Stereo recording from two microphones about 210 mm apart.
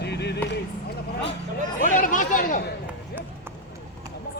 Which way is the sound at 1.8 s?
40° left (ahead or behind).